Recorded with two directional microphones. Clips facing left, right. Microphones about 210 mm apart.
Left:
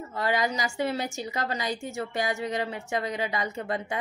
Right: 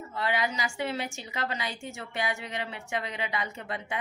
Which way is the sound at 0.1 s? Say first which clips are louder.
Left 3 dB; 40° left (ahead or behind).